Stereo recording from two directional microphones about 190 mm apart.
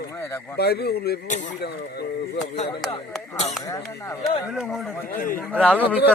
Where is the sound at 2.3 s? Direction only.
40° left (ahead or behind).